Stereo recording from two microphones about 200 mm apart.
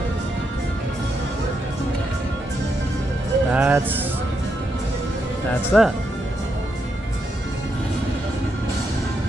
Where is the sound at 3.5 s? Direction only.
10° right (ahead or behind).